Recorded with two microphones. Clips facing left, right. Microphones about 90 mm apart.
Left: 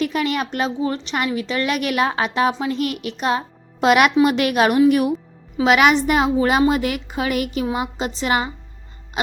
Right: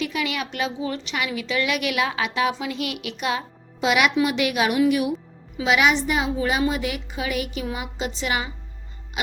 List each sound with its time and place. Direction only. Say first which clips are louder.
0.0 s a woman's voice: left 5 dB; 45° left (ahead or behind)
3.8 s a woman's voice: left 6 dB; 50° left (ahead or behind)
7.6 s a woman's voice: left 6 dB; 40° left (ahead or behind)